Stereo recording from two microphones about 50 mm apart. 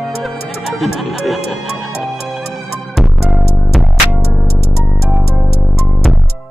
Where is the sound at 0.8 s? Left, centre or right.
Centre.